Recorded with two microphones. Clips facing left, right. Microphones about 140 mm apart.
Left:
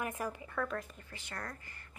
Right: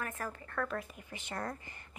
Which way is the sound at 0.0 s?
15° left (ahead or behind).